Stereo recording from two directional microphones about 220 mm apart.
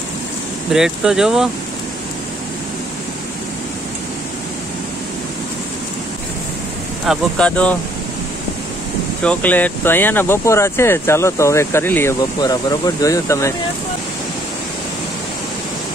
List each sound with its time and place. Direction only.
0.7 s speech: centre (ahead or behind)
7.1 s speech: 5° left (ahead or behind)
9.2 s speech: 5° left (ahead or behind)